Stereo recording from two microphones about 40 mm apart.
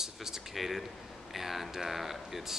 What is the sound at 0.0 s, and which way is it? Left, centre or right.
A man's voice, centre.